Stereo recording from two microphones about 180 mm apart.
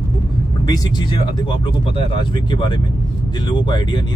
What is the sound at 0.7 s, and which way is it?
Speech, 25° left (ahead or behind).